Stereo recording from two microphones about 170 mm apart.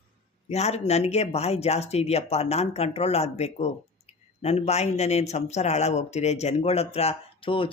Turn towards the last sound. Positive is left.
turn(degrees=30)  # may be behind; listen again after turning